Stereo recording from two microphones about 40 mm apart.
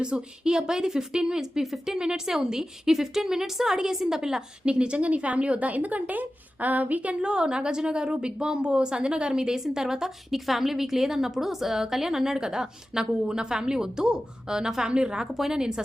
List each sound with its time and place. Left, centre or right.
0.0 s a woman's voice: right
4.6 s a woman's voice: right
7.2 s a woman's voice: right